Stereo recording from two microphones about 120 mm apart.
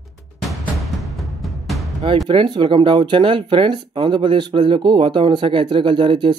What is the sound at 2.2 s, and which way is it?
Speech, 40° right (ahead or behind).